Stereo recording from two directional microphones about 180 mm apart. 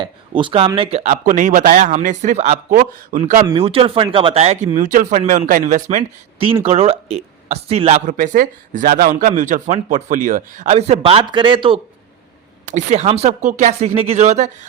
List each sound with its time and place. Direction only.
0.0 s speech: 25° right (ahead or behind); by 3.4 s 45° right (ahead or behind)
3.4 s speech: 30° right (ahead or behind)
8.0 s speech: 45° right (ahead or behind); by 11.8 s 30° right (ahead or behind)
12.7 s speech: 40° right (ahead or behind)